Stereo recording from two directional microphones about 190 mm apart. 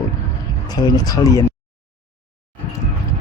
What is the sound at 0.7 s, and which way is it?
Speech, 20° left (ahead or behind).